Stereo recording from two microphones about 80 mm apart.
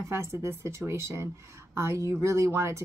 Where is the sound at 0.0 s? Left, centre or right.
Right.